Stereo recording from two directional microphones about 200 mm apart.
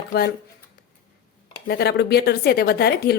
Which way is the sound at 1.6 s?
55° left (ahead or behind).